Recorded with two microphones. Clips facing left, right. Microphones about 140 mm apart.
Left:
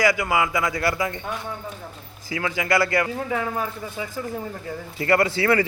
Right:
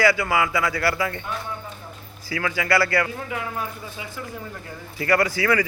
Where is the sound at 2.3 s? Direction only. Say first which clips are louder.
Even; 20° left (ahead or behind).